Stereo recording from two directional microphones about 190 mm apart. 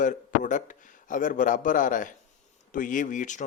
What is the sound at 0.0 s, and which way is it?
A man's voice, 40° left (ahead or behind).